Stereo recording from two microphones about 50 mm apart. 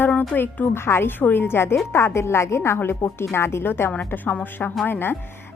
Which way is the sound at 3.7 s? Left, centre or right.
Left.